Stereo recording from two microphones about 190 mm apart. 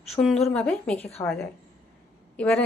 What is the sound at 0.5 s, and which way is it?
Speech, 5° left (ahead or behind).